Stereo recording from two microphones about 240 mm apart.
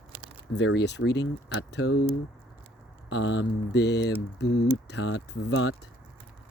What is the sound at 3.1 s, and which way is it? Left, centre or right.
Speech, left.